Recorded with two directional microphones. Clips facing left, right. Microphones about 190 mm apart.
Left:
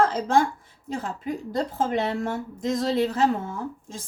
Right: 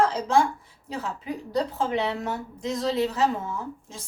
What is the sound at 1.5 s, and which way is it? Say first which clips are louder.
A woman's voice: even; 50° left (ahead or behind).